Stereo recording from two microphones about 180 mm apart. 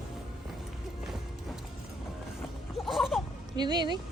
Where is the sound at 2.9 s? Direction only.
Centre (ahead or behind).